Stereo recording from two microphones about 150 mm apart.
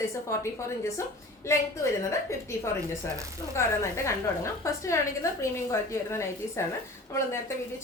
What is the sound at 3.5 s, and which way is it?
A woman's voice, 20° left (ahead or behind).